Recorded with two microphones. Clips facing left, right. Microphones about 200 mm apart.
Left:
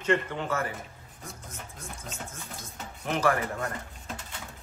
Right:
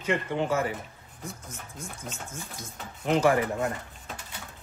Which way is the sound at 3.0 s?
20° right (ahead or behind).